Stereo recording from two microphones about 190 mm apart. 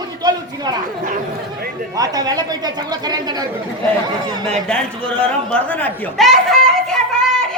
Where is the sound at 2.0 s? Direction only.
20° right (ahead or behind).